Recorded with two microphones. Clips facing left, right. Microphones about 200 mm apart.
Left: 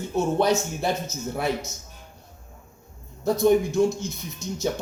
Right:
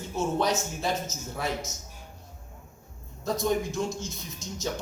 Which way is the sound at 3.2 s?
60° left (ahead or behind).